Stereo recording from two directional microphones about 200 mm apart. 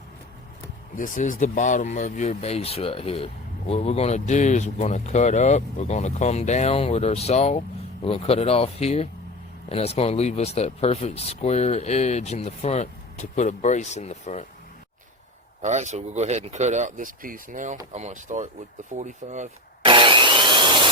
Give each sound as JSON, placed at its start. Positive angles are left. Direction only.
{"t": 0.9, "sound": "speech", "side_deg": 40}
{"t": 15.6, "sound": "speech", "side_deg": -35}
{"t": 19.8, "sound": "sawing", "side_deg": -25}